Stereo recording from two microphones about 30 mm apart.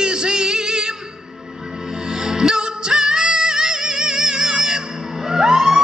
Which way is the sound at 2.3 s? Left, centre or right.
Right.